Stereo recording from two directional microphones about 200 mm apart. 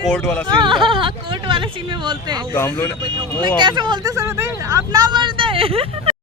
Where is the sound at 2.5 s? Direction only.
10° left (ahead or behind).